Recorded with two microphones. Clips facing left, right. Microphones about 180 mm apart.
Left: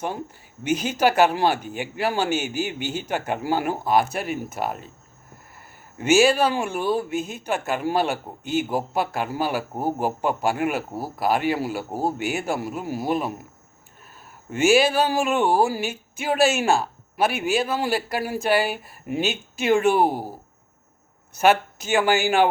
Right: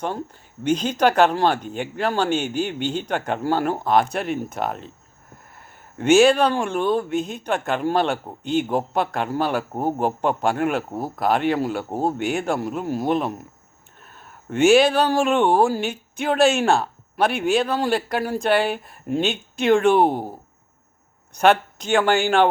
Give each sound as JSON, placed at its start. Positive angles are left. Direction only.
{"t": 0.6, "sound": "speech", "side_deg": 10}
{"t": 6.0, "sound": "speech", "side_deg": 5}
{"t": 21.3, "sound": "speech", "side_deg": 5}